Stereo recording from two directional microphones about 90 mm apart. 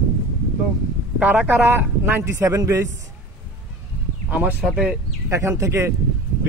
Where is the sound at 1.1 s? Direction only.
15° right (ahead or behind).